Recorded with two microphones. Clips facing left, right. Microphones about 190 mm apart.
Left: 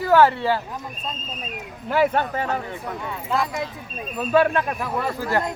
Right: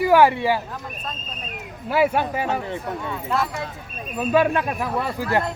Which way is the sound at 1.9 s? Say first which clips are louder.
Even; 10° right (ahead or behind).